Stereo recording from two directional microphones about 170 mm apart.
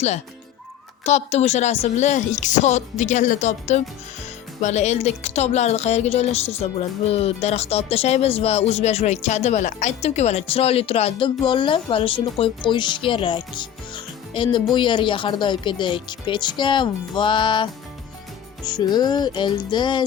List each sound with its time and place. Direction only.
1.0 s a woman's voice: 40° left (ahead or behind)
18.6 s music: 25° left (ahead or behind)